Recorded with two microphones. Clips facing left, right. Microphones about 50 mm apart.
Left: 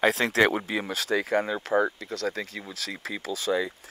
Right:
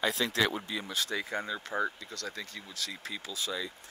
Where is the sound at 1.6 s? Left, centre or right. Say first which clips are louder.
Left 8 dB; left.